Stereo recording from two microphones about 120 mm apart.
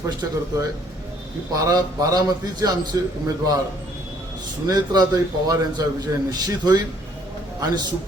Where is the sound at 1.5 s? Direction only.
30° right (ahead or behind).